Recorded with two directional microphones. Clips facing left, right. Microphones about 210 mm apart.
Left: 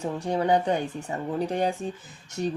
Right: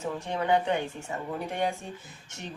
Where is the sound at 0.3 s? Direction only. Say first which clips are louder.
Left 3 dB; 35° left (ahead or behind).